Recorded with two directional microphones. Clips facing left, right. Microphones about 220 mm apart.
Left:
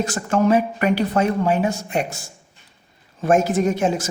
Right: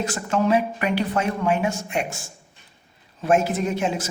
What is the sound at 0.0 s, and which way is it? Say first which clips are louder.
A woman's voice: left 3 dB; 45° left (ahead or behind).